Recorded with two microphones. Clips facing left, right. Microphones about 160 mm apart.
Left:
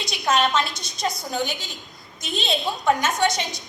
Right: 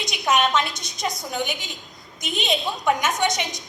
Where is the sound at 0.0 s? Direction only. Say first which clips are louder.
Even; 20° right (ahead or behind).